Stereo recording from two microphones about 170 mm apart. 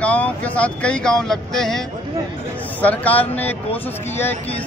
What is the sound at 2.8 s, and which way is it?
Speech, 10° left (ahead or behind).